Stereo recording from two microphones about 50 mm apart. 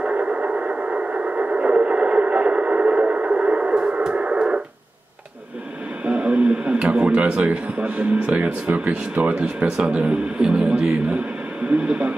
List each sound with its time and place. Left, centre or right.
0.0 s radio: right
6.0 s a sound: right
8.6 s speech: right